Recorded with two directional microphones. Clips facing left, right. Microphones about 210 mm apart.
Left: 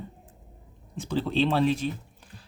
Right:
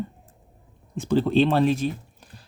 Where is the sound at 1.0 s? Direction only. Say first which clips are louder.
Right 6 dB; 50° right (ahead or behind).